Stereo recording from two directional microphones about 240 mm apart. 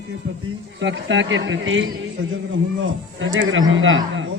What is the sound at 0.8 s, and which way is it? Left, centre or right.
A man's voice, right.